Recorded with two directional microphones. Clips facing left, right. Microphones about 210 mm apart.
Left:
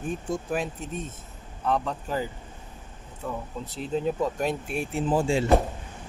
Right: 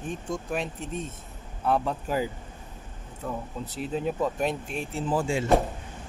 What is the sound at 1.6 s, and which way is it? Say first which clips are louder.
Speech: right 1 dB; 10° right (ahead or behind).